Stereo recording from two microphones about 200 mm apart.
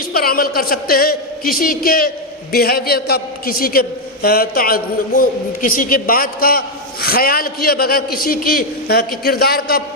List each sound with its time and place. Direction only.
0.1 s a man's voice: 50° left (ahead or behind)